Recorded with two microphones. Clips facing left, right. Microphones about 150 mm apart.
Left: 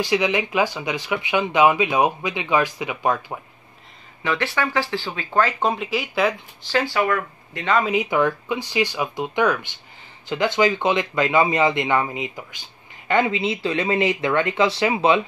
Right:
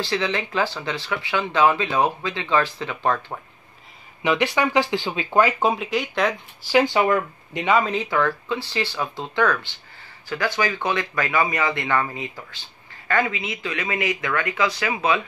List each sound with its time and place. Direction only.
0.0 s speech: 15° left (ahead or behind)
4.2 s speech: 15° right (ahead or behind); by 6.3 s 5° left (ahead or behind)
6.6 s speech: 15° right (ahead or behind)
7.8 s speech: 10° left (ahead or behind); by 15.2 s 25° left (ahead or behind)